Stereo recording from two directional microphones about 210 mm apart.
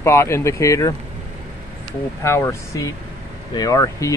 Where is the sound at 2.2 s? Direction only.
10° left (ahead or behind).